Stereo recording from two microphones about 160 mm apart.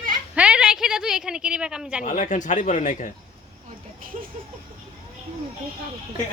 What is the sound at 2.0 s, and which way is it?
Speech, 50° left (ahead or behind).